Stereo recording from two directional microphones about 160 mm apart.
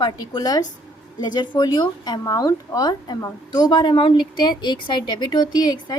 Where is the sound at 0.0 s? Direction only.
25° left (ahead or behind).